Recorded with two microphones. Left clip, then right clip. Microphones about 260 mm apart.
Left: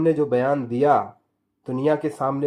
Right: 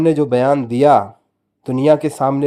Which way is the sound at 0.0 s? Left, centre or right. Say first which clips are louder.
Right 6 dB; right.